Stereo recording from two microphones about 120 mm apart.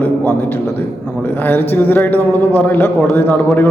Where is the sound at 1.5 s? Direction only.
15° left (ahead or behind).